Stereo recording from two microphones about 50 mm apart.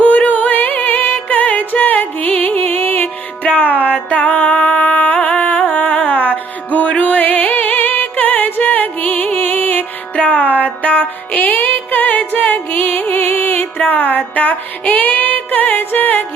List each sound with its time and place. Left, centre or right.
0.0 s music: left